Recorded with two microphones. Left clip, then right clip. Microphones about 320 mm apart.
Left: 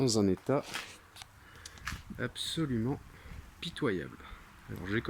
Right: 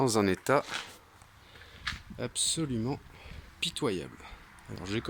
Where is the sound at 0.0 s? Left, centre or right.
Right.